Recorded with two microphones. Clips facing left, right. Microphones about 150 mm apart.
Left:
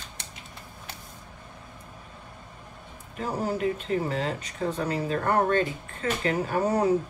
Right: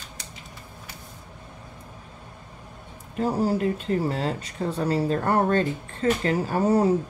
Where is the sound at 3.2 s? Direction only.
35° right (ahead or behind).